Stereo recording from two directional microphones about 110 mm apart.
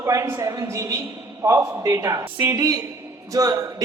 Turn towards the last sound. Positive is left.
turn(degrees=-30)  # may be behind; listen again after turning